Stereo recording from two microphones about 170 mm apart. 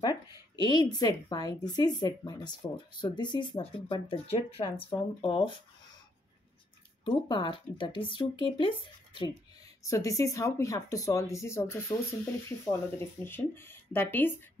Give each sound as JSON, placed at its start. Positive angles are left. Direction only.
{"t": 0.7, "sound": "speech", "side_deg": 25}
{"t": 7.1, "sound": "speech", "side_deg": 30}